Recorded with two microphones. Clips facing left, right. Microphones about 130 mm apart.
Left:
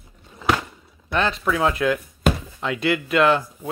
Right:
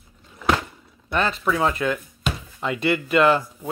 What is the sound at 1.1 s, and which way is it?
Speech, centre (ahead or behind).